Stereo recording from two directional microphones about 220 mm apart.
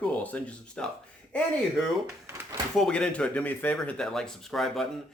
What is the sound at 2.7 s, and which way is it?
Speech, 5° left (ahead or behind).